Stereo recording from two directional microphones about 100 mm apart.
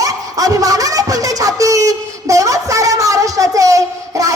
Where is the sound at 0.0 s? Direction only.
35° right (ahead or behind).